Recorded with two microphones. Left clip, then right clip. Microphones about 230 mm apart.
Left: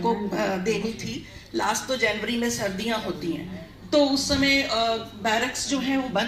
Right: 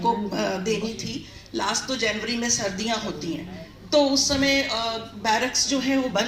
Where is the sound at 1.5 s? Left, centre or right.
Right.